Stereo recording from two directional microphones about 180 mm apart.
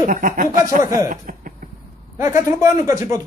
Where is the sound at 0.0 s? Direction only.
50° right (ahead or behind).